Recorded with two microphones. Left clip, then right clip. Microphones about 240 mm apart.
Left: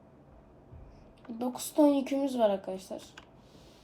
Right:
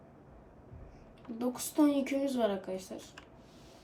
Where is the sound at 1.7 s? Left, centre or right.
Left.